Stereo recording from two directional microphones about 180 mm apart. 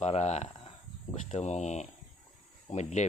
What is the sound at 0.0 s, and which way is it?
Speech, 40° left (ahead or behind).